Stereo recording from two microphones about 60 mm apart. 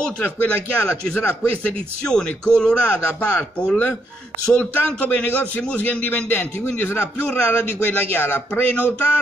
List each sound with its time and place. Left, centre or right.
0.2 s a man's voice: left
2.0 s a man's voice: centre; by 8.9 s left